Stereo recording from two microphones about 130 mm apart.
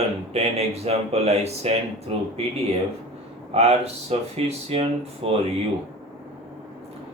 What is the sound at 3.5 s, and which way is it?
Speech, 55° right (ahead or behind).